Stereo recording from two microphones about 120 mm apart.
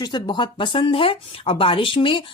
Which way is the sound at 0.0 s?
40° left (ahead or behind).